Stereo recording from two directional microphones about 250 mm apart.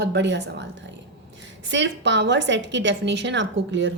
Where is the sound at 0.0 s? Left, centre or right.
Right.